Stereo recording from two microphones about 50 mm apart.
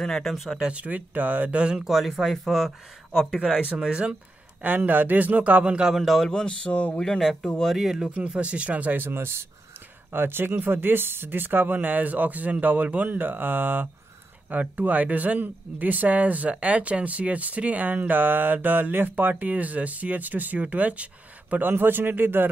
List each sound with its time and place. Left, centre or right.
0.0 s speech: centre
0.7 s speech: right
1.9 s speech: centre
3.3 s speech: centre
4.6 s speech: right
5.9 s speech: centre
6.4 s speech: left
7.7 s speech: centre
8.0 s speech: centre; by 9.5 s right
10.1 s speech: right
21.6 s a man's voice: right